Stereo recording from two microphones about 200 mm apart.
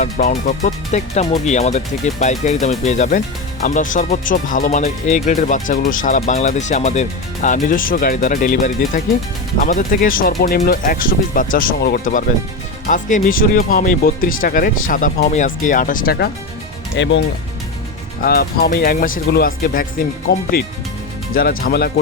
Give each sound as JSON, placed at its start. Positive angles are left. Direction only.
{"t": 0.0, "sound": "speech", "side_deg": 40}
{"t": 16.9, "sound": "speech", "side_deg": 65}
{"t": 18.2, "sound": "speech", "side_deg": 50}
{"t": 20.3, "sound": "speech", "side_deg": 60}